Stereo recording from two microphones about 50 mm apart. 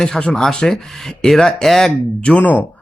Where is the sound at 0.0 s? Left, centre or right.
Centre.